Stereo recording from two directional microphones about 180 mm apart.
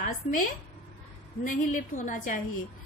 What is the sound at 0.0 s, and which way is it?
A woman's voice, 50° left (ahead or behind).